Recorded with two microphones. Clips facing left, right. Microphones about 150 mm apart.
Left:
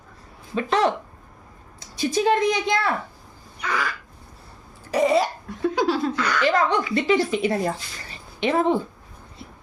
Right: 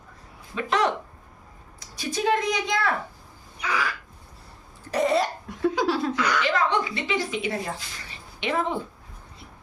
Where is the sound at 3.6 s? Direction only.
5° right (ahead or behind).